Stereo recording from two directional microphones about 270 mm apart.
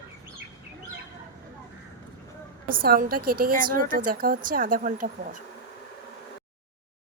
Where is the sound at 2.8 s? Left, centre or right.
Right.